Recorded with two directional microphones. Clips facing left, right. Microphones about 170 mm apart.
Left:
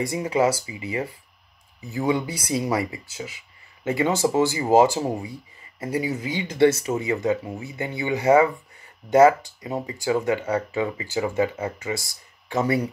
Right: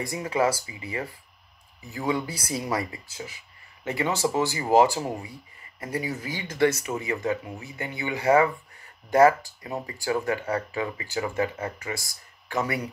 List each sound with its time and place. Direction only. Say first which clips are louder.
0.0 s speech: left 3 dB; 25° left (ahead or behind)